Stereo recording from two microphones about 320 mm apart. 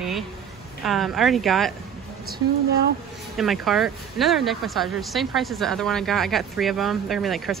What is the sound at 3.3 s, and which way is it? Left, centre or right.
Speech, centre.